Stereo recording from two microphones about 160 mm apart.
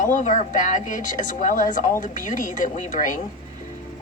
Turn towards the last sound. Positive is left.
turn(degrees=50)  # may be behind; listen again after turning